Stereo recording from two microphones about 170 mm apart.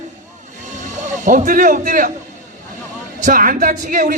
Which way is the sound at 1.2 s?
50° right (ahead or behind).